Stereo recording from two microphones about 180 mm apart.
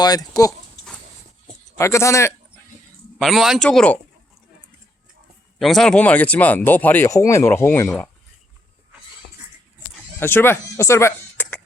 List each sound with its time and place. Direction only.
0.0 s speech: 20° left (ahead or behind)
1.8 s speech: 15° left (ahead or behind)
3.2 s speech: centre (ahead or behind)
5.5 s speech: centre (ahead or behind)
10.2 s speech: 10° left (ahead or behind)